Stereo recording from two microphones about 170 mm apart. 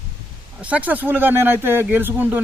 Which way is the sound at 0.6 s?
10° right (ahead or behind).